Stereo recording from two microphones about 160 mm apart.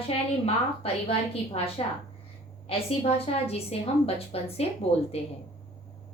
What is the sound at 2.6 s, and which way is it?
A woman's voice, 40° left (ahead or behind).